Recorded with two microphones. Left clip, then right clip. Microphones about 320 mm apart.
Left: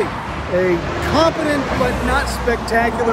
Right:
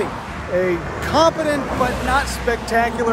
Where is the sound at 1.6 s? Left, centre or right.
Left.